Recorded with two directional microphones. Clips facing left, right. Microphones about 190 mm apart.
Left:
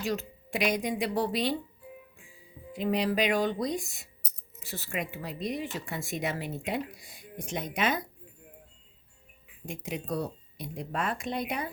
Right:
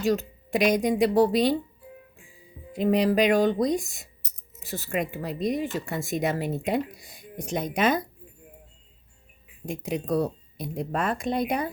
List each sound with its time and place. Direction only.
0.0 s speech: 40° right (ahead or behind)
2.7 s speech: 45° right (ahead or behind)
9.6 s speech: 40° right (ahead or behind)